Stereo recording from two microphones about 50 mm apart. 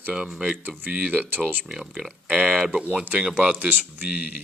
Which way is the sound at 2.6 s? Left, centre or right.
Centre.